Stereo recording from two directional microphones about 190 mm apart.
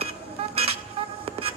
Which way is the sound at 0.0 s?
30° right (ahead or behind).